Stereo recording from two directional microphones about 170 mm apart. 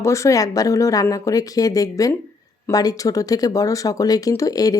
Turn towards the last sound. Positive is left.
turn(degrees=20)  # may be behind; listen again after turning